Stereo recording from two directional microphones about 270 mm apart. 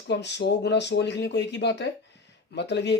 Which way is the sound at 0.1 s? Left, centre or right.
Left.